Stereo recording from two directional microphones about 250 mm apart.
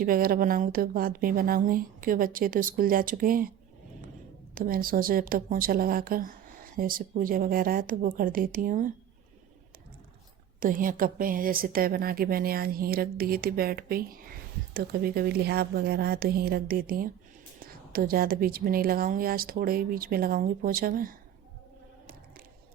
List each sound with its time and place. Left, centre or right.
0.0 s speech: right
4.5 s speech: right
10.6 s speech: right